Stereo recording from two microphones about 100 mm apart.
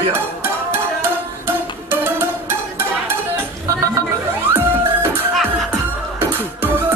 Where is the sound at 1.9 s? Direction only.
20° right (ahead or behind).